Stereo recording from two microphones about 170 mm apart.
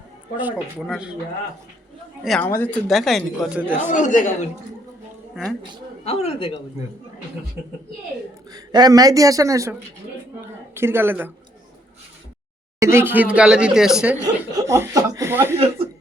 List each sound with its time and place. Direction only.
0.3 s speech: 5° right (ahead or behind)
2.2 s speech: centre (ahead or behind)
2.5 s speech: 15° left (ahead or behind)
2.8 s speech: centre (ahead or behind)
3.6 s speech: 10° right (ahead or behind)
3.8 s speech: 45° left (ahead or behind)
5.3 s speech: centre (ahead or behind)
6.1 s speech: 40° left (ahead or behind)
8.5 s speech: 25° right (ahead or behind)
10.8 s speech: 15° right (ahead or behind)
12.8 s speech: 15° right (ahead or behind)
14.7 s speech: 20° right (ahead or behind)
15.5 s a sound: 35° right (ahead or behind)